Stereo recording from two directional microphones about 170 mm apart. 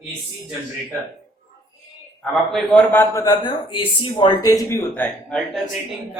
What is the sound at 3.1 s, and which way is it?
Speech, 20° left (ahead or behind).